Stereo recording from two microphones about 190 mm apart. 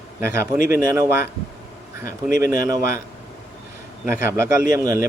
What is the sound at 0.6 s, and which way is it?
Speech, 45° left (ahead or behind).